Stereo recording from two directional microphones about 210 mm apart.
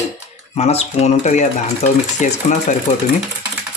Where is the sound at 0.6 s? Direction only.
30° left (ahead or behind).